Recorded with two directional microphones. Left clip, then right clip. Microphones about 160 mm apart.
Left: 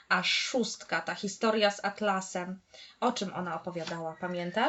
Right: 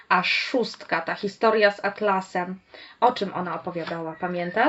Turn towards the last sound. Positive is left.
turn(degrees=-30)  # may be behind; listen again after turning